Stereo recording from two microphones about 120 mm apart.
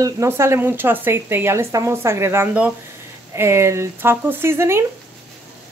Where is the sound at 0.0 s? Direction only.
25° right (ahead or behind).